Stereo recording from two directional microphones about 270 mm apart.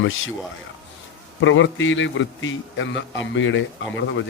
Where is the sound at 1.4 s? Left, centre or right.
Left.